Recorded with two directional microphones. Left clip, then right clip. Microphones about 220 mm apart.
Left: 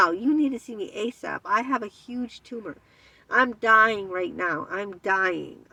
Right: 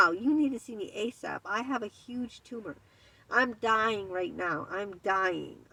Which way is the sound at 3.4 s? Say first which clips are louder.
Left 9 dB; 20° left (ahead or behind).